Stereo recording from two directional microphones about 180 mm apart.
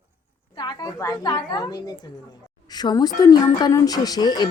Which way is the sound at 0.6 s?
25° left (ahead or behind).